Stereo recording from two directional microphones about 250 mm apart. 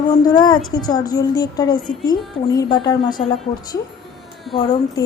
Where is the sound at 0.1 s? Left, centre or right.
Centre.